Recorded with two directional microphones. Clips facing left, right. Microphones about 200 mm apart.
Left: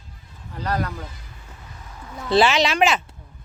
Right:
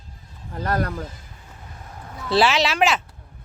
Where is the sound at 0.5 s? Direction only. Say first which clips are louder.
Right 2 dB; 45° right (ahead or behind).